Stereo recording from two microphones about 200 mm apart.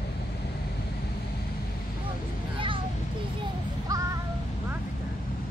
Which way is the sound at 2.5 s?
25° right (ahead or behind).